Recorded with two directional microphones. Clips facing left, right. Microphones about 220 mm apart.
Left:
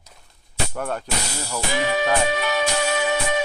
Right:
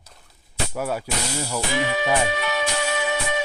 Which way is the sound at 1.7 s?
45° left (ahead or behind).